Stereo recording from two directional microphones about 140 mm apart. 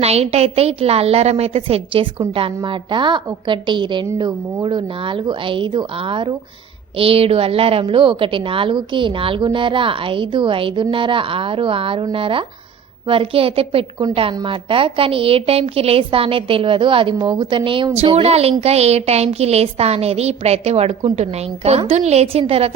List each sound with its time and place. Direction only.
0.0 s a woman's voice: 50° right (ahead or behind)